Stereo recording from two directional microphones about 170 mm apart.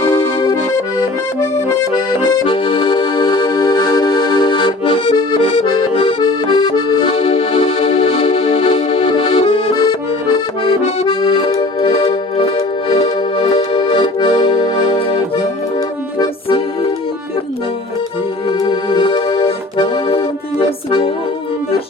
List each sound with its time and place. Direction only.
0.1 s accordion: 30° left (ahead or behind)
2.4 s accordion: 30° left (ahead or behind)
16.1 s accordion: 25° left (ahead or behind)
18.6 s accordion: 30° left (ahead or behind)